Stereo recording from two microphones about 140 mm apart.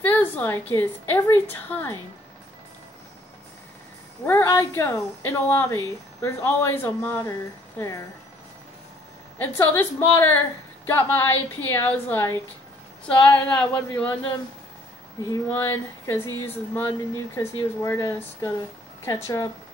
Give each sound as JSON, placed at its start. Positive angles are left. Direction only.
{"t": 0.0, "sound": "a woman's voice", "side_deg": 15}
{"t": 4.3, "sound": "speech", "side_deg": 20}
{"t": 9.4, "sound": "a woman's voice", "side_deg": 15}
{"t": 15.2, "sound": "a woman's voice", "side_deg": 20}